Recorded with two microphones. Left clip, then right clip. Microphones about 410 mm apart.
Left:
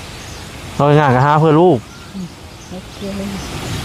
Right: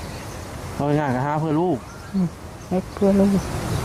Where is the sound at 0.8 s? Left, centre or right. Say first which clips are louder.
Left 11 dB; left.